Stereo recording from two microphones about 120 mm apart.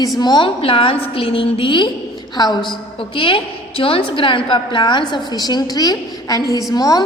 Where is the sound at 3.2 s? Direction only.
45° left (ahead or behind).